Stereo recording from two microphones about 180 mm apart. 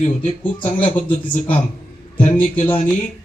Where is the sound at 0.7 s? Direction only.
30° left (ahead or behind).